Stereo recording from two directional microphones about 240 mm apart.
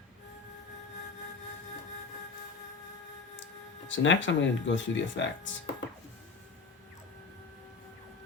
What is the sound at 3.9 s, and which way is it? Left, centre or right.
Speech, left.